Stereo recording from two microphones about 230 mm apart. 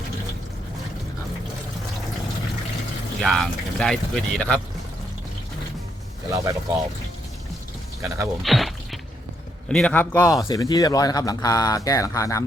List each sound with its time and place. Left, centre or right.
3.2 s speech: centre
6.3 s speech: centre
8.0 s speech: centre
8.4 s a sound: centre
9.6 s speech: centre